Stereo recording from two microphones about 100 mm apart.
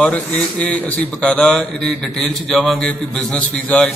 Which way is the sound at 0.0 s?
10° left (ahead or behind).